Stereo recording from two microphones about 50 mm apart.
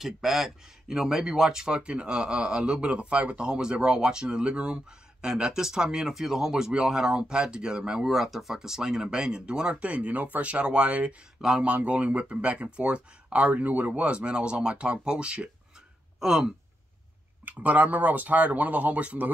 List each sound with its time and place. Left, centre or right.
0.0 s speech: centre
17.5 s speech: right